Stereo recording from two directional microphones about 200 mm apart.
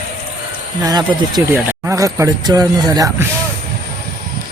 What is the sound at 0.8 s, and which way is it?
Speech, 20° right (ahead or behind).